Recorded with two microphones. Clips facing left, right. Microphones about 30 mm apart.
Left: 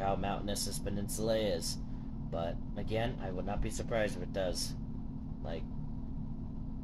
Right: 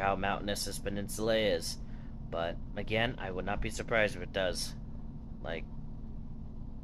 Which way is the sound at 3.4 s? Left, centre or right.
Right.